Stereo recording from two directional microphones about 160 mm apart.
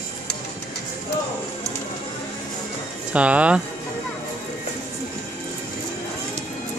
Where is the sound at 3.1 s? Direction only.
10° right (ahead or behind).